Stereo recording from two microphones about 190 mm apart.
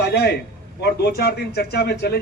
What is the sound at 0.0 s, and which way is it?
A man's voice, 60° left (ahead or behind).